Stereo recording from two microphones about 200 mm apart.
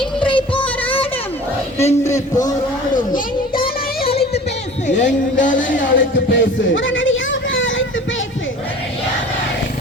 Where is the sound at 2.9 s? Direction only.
40° left (ahead or behind).